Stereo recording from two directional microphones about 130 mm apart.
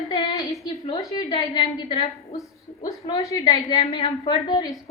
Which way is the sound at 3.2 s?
25° left (ahead or behind).